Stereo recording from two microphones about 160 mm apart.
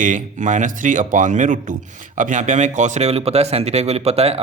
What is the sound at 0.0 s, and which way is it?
A man's voice, 50° right (ahead or behind).